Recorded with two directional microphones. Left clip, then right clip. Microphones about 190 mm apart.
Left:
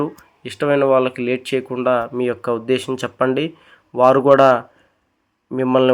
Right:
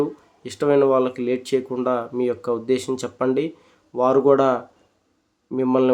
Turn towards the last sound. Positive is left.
turn(degrees=5)  # may be behind; listen again after turning